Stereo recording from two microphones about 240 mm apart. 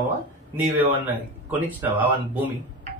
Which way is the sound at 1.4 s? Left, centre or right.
Centre.